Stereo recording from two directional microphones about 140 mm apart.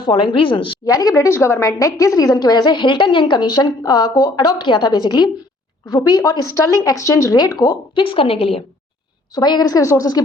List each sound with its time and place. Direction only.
0.1 s a woman's voice: 35° left (ahead or behind)
0.9 s a woman's voice: 25° left (ahead or behind); by 8.6 s 45° left (ahead or behind)
9.3 s a woman's voice: 30° left (ahead or behind)